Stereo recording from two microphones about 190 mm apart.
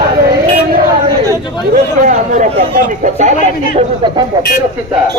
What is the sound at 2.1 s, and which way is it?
Speech, 45° right (ahead or behind).